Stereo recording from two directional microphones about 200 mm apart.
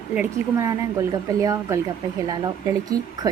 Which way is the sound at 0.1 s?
10° right (ahead or behind).